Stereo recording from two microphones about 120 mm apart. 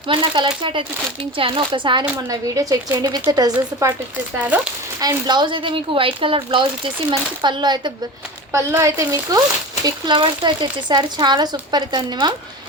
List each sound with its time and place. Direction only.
0.1 s speech: 45° right (ahead or behind)
2.3 s speech: 30° right (ahead or behind)
4.4 s speech: 10° right (ahead or behind)
4.9 s speech: 35° right (ahead or behind)
8.5 s speech: 25° right (ahead or behind)
9.8 s speech: 40° right (ahead or behind)